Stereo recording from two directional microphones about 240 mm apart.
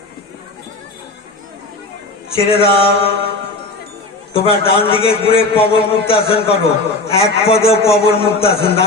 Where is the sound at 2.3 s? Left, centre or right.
Left.